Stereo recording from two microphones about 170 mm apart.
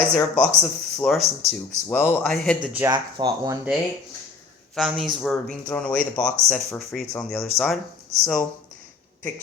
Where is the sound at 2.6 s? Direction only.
10° right (ahead or behind).